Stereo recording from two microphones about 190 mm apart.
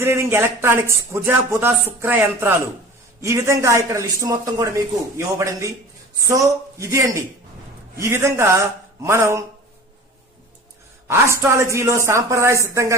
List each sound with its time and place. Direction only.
0.0 s speech: 15° right (ahead or behind)
11.1 s speech: 15° right (ahead or behind)